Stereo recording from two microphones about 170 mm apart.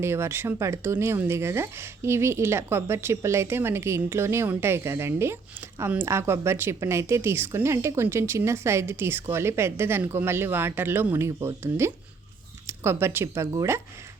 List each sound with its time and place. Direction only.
0.0 s speech: 15° right (ahead or behind)